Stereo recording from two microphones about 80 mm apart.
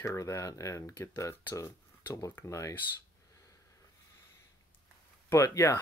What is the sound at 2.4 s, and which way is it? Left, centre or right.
Speech, left.